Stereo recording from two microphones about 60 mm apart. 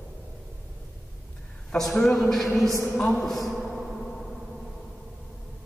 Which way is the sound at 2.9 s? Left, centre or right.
Centre.